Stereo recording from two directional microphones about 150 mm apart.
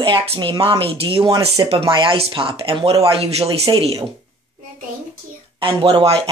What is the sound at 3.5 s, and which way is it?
Speech, 25° right (ahead or behind).